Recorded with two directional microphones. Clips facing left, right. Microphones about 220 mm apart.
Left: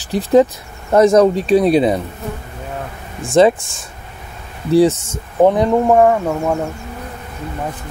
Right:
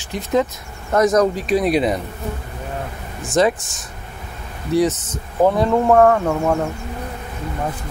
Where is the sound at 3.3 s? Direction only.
25° left (ahead or behind).